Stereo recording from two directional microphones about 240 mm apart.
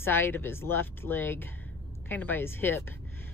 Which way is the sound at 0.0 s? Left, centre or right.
Centre.